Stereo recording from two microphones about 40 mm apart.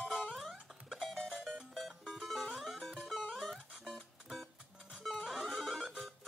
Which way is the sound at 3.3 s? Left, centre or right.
Centre.